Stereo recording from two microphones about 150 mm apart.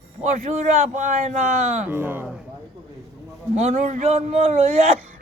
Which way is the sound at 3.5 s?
50° right (ahead or behind).